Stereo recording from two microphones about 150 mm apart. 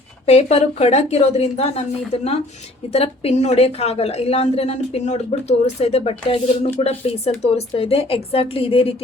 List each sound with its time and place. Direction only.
0.3 s a woman's voice: 45° left (ahead or behind)
2.9 s a woman's voice: 45° left (ahead or behind)